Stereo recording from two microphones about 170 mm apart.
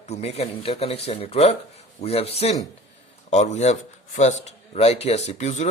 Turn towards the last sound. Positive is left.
turn(degrees=45)  # may be behind; listen again after turning